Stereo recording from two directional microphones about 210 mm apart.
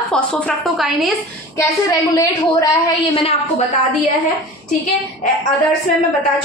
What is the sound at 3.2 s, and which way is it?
Speech, 30° left (ahead or behind).